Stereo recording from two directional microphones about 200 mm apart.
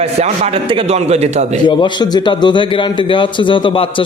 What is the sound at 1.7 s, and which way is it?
A man's voice, 20° left (ahead or behind).